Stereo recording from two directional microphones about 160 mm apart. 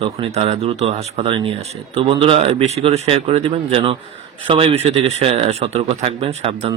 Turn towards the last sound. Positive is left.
turn(degrees=-40)  # may be behind; listen again after turning